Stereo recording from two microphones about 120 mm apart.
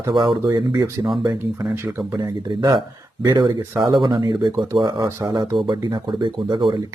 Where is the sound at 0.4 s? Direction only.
35° right (ahead or behind).